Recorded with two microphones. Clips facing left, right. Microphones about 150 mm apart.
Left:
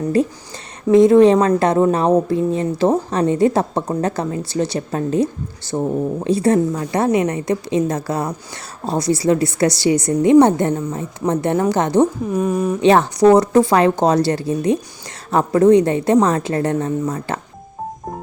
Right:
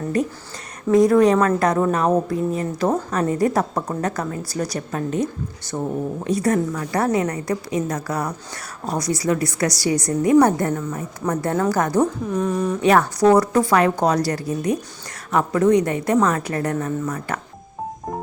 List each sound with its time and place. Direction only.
0.1 s a woman's voice: 30° left (ahead or behind)
12.3 s speech: 10° left (ahead or behind)
12.8 s a woman's voice: 25° left (ahead or behind)